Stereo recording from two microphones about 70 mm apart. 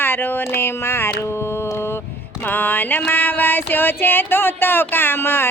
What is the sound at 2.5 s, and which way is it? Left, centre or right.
Music, left.